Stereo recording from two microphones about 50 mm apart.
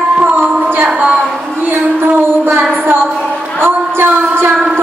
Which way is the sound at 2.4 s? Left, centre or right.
Right.